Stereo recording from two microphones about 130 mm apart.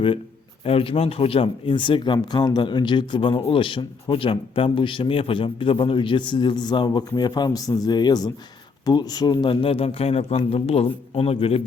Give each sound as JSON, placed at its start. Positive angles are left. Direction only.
{"t": 0.6, "sound": "a man's voice", "side_deg": 50}